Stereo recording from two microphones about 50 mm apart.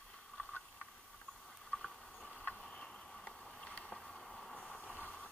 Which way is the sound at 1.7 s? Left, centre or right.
Centre.